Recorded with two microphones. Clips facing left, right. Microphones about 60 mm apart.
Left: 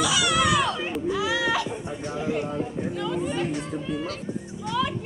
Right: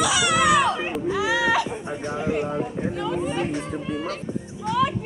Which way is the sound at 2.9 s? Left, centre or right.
Centre.